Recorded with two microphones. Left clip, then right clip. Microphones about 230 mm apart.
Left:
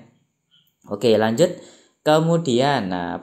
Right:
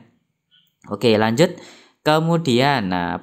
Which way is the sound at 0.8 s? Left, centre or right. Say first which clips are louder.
Even; right.